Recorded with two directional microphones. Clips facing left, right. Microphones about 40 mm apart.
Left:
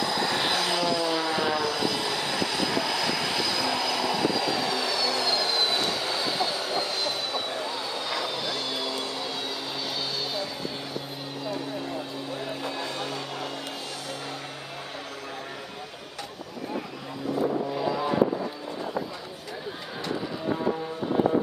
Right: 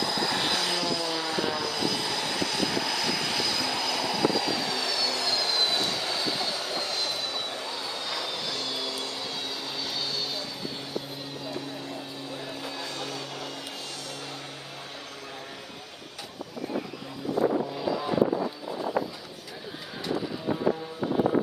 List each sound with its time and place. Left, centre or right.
0.0 s vehicle: centre
9.8 s music: centre
12.4 s music: centre
17.7 s vehicle: centre